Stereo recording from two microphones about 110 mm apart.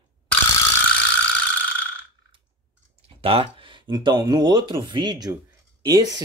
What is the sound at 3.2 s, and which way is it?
Speech, 60° right (ahead or behind).